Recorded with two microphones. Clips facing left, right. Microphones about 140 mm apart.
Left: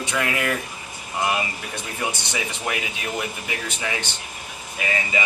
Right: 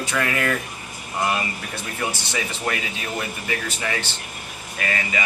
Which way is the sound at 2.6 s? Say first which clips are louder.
Right 1 dB; 10° left (ahead or behind).